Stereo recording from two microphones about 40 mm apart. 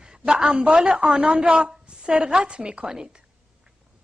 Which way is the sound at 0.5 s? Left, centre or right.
Right.